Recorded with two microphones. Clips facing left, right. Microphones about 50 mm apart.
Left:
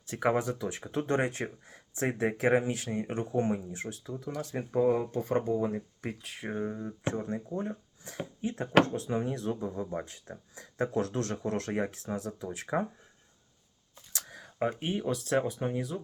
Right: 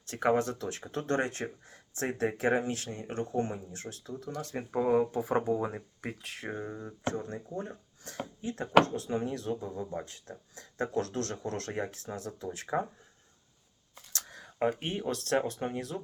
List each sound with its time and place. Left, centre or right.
0.1 s speech: centre
4.5 s speech: centre
6.3 s speech: centre
7.0 s speech: left
9.0 s speech: centre
14.1 s a sound: centre
14.6 s speech: centre